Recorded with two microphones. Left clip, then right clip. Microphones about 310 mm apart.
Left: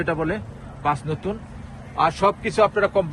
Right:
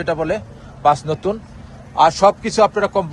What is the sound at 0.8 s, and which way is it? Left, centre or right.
Speech, centre.